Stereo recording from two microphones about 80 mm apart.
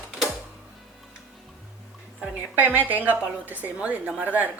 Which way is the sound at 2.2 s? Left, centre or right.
Right.